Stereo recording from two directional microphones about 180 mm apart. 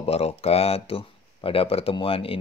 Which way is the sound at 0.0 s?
35° left (ahead or behind).